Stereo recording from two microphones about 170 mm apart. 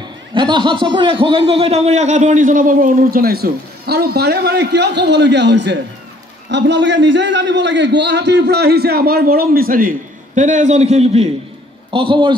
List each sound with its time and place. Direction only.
0.3 s a man's voice: 25° right (ahead or behind)
11.9 s a man's voice: 30° right (ahead or behind)